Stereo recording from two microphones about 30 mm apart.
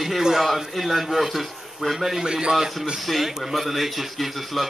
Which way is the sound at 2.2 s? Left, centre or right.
Right.